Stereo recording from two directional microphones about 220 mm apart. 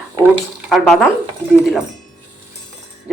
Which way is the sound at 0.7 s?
Centre (ahead or behind).